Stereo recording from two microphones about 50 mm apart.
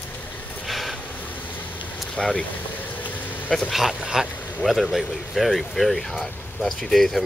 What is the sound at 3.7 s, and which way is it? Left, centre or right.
Speech, centre.